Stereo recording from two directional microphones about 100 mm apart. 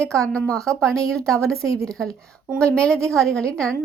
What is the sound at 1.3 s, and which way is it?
Speech, 30° right (ahead or behind).